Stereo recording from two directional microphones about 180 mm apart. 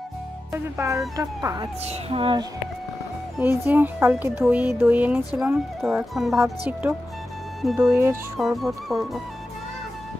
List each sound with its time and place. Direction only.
0.5 s speech: 15° right (ahead or behind)
1.9 s speech: 35° right (ahead or behind)
3.3 s speech: 10° right (ahead or behind)
7.9 s speech: 15° right (ahead or behind)
8.4 s speech: centre (ahead or behind)